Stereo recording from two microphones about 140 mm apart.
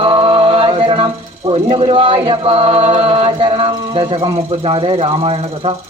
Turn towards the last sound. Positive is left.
turn(degrees=-40)  # may be behind; listen again after turning